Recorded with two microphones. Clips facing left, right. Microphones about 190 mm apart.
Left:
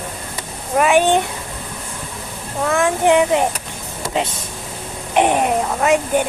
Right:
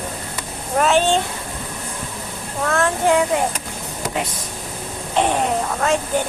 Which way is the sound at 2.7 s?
15° left (ahead or behind).